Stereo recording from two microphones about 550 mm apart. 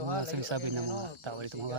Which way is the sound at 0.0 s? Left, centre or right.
Right.